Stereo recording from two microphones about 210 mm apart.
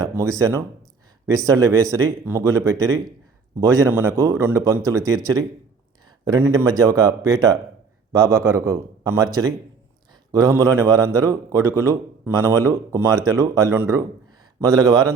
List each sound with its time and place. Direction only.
0.0 s speech: 15° right (ahead or behind)